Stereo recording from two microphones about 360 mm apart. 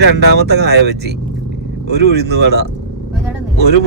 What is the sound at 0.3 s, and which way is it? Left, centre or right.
Speech, right.